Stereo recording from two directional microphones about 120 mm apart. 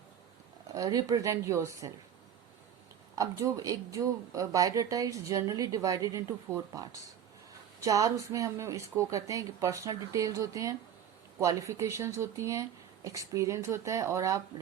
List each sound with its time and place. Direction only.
0.7 s speech: 30° right (ahead or behind)
3.2 s speech: 30° right (ahead or behind)